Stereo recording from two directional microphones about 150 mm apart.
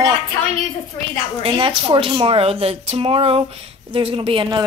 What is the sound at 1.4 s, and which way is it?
Speech, 35° right (ahead or behind).